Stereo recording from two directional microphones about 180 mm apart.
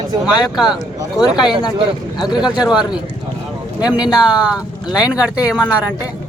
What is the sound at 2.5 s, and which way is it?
Speech, 5° right (ahead or behind).